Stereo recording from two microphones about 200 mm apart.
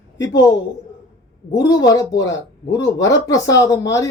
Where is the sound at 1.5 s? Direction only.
20° left (ahead or behind).